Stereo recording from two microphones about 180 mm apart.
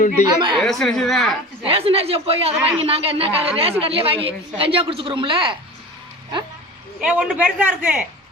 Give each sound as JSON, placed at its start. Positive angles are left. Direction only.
{"t": 0.6, "sound": "speech", "side_deg": 0}
{"t": 1.6, "sound": "a woman's voice", "side_deg": -30}
{"t": 7.0, "sound": "a man's voice", "side_deg": -5}